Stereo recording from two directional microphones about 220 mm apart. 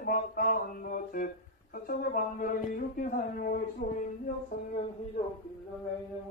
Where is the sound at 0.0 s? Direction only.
40° left (ahead or behind).